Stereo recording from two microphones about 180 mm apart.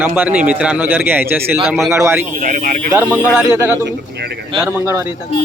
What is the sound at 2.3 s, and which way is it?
Speech, 50° right (ahead or behind).